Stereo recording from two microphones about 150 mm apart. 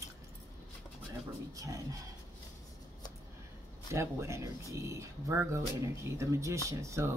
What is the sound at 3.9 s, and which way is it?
Speech, 20° right (ahead or behind).